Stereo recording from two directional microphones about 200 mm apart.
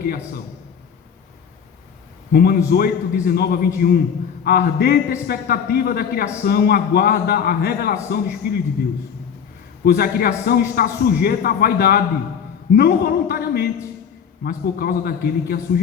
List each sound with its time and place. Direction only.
2.3 s a man's voice: 50° left (ahead or behind)
9.8 s a man's voice: 50° left (ahead or behind)